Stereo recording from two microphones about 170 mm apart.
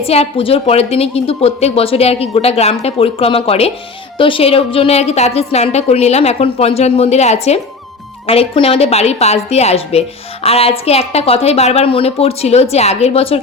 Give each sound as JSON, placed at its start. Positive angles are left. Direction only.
{"t": 0.0, "sound": "a woman's voice", "side_deg": 35}